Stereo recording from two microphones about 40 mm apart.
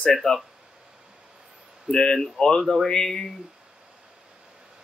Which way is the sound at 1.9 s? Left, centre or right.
Left.